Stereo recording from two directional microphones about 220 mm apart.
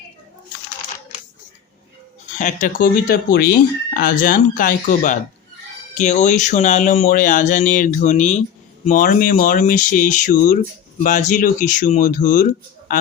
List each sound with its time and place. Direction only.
2.4 s speech: 35° left (ahead or behind)